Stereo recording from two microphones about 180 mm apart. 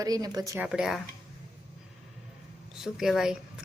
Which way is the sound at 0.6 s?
5° right (ahead or behind).